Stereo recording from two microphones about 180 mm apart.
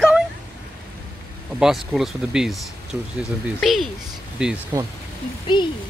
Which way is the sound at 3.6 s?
Centre (ahead or behind).